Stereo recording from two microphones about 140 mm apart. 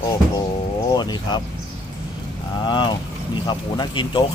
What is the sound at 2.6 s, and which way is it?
Speech, 35° left (ahead or behind).